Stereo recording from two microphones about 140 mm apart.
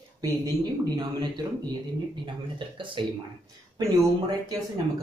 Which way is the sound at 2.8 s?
35° right (ahead or behind).